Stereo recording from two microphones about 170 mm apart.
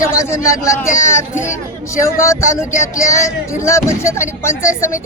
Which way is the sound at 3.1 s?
15° left (ahead or behind).